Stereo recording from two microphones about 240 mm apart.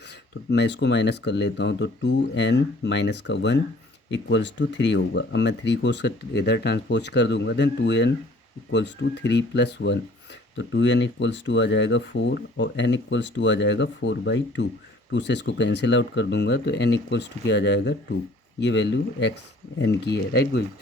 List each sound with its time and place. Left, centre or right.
0.5 s speech: left